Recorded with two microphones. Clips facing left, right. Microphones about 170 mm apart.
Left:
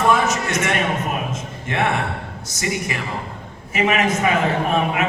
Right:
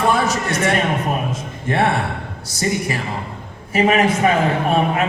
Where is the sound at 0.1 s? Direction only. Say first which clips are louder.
Even; 35° right (ahead or behind).